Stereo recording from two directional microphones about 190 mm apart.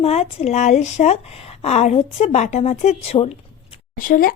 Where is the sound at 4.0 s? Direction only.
45° left (ahead or behind).